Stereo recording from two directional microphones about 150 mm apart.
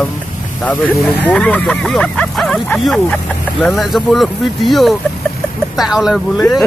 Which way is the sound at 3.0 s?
10° left (ahead or behind).